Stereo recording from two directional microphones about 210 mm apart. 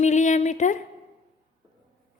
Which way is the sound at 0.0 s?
35° left (ahead or behind).